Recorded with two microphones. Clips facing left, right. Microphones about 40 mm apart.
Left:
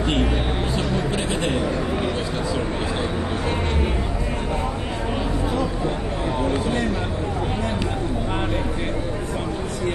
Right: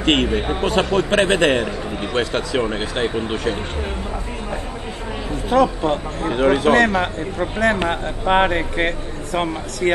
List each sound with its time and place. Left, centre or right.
0.0 s a man's voice: right
5.5 s speech: right
7.8 s speech: right